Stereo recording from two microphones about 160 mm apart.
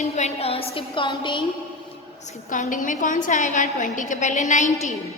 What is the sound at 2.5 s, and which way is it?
A woman's voice, 55° left (ahead or behind).